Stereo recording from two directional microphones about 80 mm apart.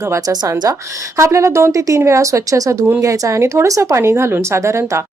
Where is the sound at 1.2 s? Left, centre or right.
Right.